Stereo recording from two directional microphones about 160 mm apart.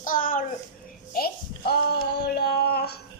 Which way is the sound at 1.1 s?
75° left (ahead or behind).